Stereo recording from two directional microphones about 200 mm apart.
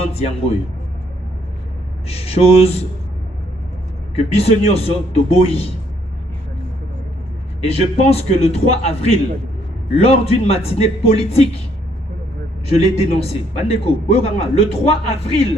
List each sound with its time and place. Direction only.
2.0 s speech: 30° left (ahead or behind)
4.1 s a man's voice: 30° left (ahead or behind)
7.6 s a man's voice: 30° left (ahead or behind)
12.7 s a man's voice: 30° left (ahead or behind)